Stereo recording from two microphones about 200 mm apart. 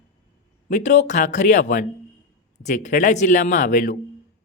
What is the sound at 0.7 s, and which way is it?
Speech, 35° left (ahead or behind).